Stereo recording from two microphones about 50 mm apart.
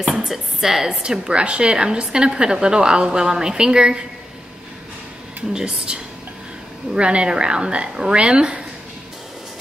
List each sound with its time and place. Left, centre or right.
0.3 s a woman's voice: centre
5.5 s a woman's voice: centre